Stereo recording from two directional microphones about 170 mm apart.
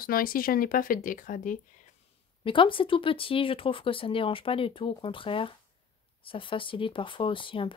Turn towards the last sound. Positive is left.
turn(degrees=30)  # may be behind; listen again after turning